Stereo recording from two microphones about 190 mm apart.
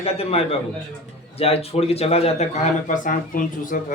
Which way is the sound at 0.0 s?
30° left (ahead or behind).